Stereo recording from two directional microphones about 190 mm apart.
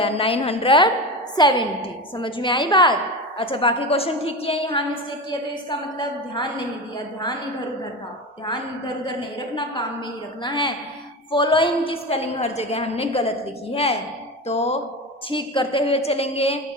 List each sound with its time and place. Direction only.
0.0 s a woman's voice: 30° left (ahead or behind)
6.0 s a woman's voice: 25° left (ahead or behind)
10.4 s a woman's voice: 25° left (ahead or behind)